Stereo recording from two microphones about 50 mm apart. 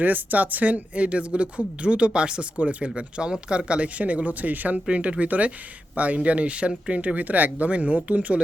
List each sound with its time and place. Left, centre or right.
0.0 s speech: right
4.9 s speech: right